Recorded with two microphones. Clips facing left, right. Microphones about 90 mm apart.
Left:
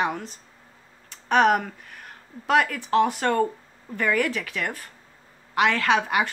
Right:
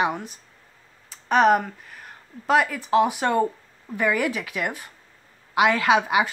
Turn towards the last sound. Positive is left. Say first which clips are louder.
# right 2 dB
turn(degrees=-10)  # may be behind; listen again after turning